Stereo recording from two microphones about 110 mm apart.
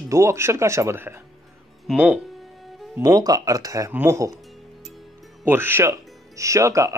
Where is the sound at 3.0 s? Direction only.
35° right (ahead or behind).